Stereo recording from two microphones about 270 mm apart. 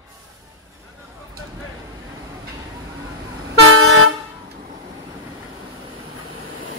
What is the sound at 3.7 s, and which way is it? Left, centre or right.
Vehicle horn, right.